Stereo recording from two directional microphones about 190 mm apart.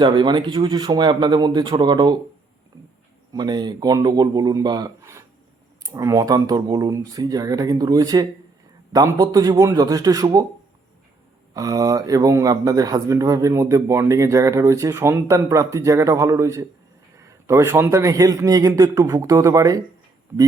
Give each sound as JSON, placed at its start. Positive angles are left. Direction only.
{"t": 0.0, "sound": "speech", "side_deg": -25}
{"t": 3.3, "sound": "speech", "side_deg": -20}
{"t": 11.5, "sound": "a man's voice", "side_deg": -20}